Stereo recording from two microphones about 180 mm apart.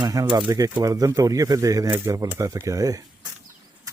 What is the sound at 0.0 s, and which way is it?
Speech, 20° right (ahead or behind).